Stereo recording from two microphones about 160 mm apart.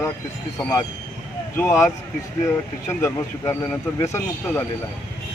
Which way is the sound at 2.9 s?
15° left (ahead or behind).